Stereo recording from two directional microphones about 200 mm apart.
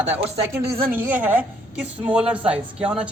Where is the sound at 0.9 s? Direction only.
10° right (ahead or behind).